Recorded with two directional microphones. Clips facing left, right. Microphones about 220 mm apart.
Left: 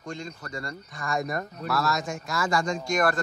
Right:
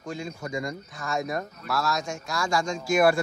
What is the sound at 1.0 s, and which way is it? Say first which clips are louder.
Speech: even; centre (ahead or behind).